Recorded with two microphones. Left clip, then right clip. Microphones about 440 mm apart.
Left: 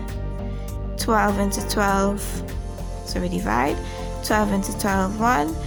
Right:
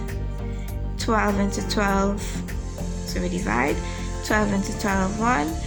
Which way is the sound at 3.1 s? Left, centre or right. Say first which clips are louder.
Left 2 dB; left.